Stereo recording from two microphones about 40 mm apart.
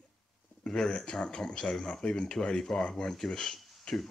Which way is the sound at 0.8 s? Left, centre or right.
Left.